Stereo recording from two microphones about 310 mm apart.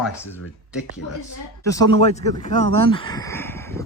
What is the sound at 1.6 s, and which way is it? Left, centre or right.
Speech, centre.